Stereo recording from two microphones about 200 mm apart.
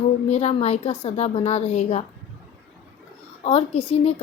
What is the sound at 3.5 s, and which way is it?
Speech, 30° left (ahead or behind).